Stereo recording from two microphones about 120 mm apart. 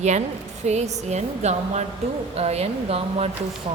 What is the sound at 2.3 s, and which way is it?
Speech, 60° right (ahead or behind).